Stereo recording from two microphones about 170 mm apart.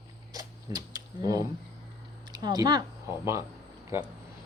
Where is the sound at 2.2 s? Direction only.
25° right (ahead or behind).